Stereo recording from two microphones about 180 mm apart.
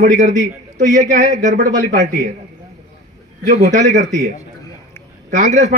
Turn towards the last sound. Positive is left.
turn(degrees=-40)  # may be behind; listen again after turning